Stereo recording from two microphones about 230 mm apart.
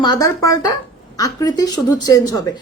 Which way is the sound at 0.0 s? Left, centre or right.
Centre.